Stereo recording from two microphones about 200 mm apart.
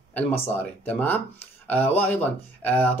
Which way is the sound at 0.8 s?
5° left (ahead or behind).